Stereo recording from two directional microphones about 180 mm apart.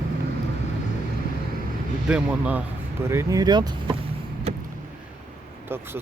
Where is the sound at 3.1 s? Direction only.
15° right (ahead or behind).